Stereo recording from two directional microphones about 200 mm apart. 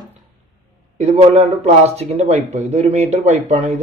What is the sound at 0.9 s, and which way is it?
Speech, 35° right (ahead or behind).